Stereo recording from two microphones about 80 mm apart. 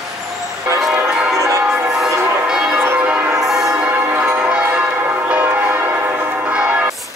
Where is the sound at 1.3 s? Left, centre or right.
Right.